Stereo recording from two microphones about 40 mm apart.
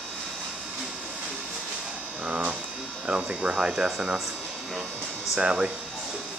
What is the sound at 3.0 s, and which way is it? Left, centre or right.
Speech, right.